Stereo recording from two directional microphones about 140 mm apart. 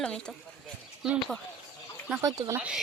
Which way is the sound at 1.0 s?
5° right (ahead or behind).